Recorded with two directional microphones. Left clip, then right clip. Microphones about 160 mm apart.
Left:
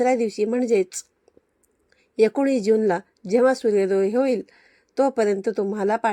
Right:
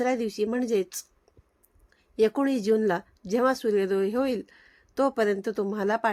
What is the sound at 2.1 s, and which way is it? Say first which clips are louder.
Speech: left 5 dB; 15° left (ahead or behind).